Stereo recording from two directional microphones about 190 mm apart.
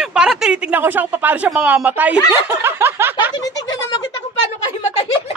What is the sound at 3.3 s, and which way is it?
Snicker, 20° left (ahead or behind).